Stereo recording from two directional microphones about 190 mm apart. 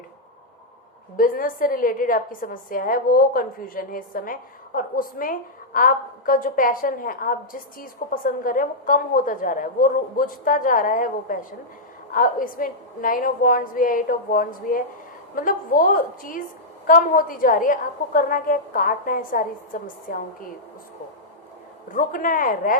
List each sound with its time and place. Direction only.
1.1 s a woman's voice: 50° left (ahead or behind)
21.9 s a woman's voice: 45° left (ahead or behind)